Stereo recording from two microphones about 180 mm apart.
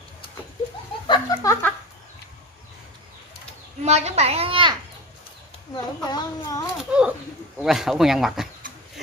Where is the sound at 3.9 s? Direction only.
35° right (ahead or behind).